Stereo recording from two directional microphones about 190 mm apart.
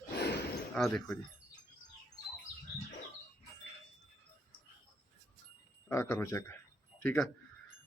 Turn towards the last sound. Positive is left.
turn(degrees=10)  # may be behind; listen again after turning